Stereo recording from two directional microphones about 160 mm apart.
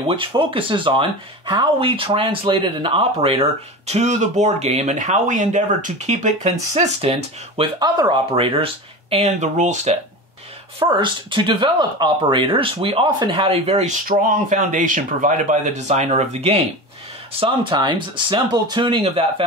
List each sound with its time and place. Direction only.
0.0 s speech: 30° right (ahead or behind); by 9.9 s 50° right (ahead or behind)
10.8 s speech: 30° right (ahead or behind)
14.0 s speech: 55° right (ahead or behind); by 19.4 s 35° right (ahead or behind)